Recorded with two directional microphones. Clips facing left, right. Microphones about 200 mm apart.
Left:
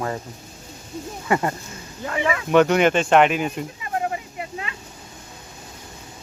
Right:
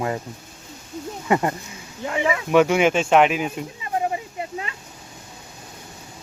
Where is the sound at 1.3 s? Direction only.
15° right (ahead or behind).